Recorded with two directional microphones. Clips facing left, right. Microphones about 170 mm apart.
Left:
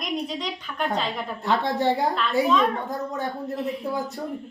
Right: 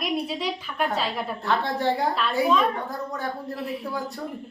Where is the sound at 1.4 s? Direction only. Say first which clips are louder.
Left 2 dB; 20° left (ahead or behind).